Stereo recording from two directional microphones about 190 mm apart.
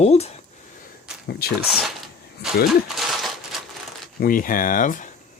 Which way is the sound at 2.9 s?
Centre (ahead or behind).